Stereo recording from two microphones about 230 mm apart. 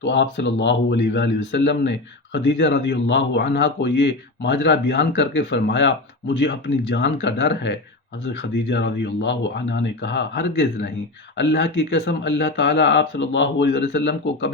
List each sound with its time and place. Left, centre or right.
0.0 s a man's voice: left